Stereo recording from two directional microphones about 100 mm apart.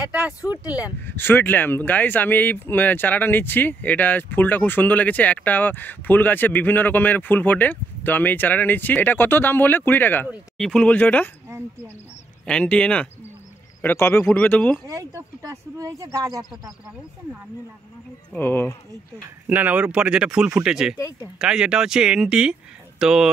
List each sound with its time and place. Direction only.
0.0 s a sound: 10° right (ahead or behind)
0.5 s speech: 15° right (ahead or behind)
1.0 s speech: 20° left (ahead or behind)
10.6 s speech: 10° left (ahead or behind)
12.4 s speech: 10° left (ahead or behind)
13.7 s speech: 25° left (ahead or behind)
14.3 s speech: 15° left (ahead or behind)
14.9 s speech: 35° right (ahead or behind)
18.4 s speech: 20° left (ahead or behind)
19.4 s speech: 15° right (ahead or behind)